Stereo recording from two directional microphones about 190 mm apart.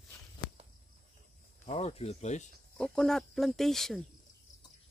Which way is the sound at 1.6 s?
35° left (ahead or behind).